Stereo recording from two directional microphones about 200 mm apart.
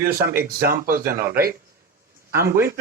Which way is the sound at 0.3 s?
45° right (ahead or behind).